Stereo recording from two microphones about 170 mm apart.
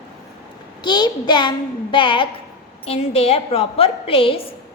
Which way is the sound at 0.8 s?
25° left (ahead or behind).